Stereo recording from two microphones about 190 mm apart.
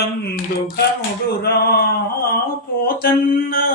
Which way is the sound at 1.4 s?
55° left (ahead or behind).